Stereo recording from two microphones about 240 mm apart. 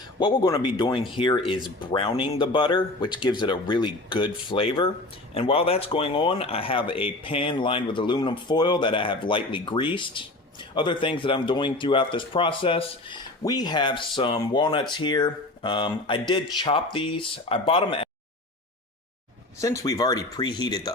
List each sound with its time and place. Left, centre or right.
0.2 s speech: centre
19.6 s speech: centre